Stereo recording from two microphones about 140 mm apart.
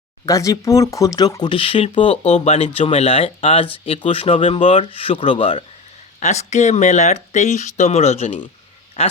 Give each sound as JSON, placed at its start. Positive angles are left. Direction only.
{"t": 0.3, "sound": "speech", "side_deg": 25}
{"t": 6.1, "sound": "speech", "side_deg": 55}